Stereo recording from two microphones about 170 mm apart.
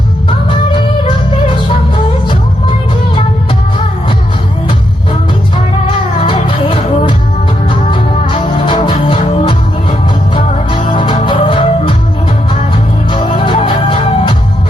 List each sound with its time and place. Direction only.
0.3 s music: 30° left (ahead or behind)
6.1 s music: 30° left (ahead or behind)
13.1 s music: 30° left (ahead or behind)